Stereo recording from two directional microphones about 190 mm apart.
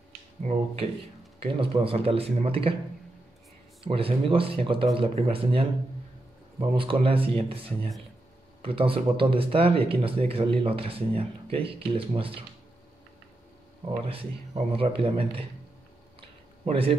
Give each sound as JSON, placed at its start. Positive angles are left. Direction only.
{"t": 0.4, "sound": "speech", "side_deg": -35}
{"t": 3.8, "sound": "speech", "side_deg": -30}
{"t": 14.5, "sound": "speech", "side_deg": -30}
{"t": 16.2, "sound": "a sound", "side_deg": -30}